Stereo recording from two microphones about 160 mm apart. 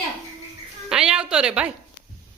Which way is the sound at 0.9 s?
5° right (ahead or behind).